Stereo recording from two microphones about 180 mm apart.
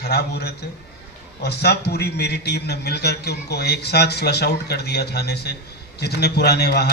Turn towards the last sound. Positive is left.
turn(degrees=65)  # may be behind; listen again after turning